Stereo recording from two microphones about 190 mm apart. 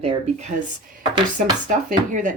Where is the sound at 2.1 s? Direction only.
40° right (ahead or behind).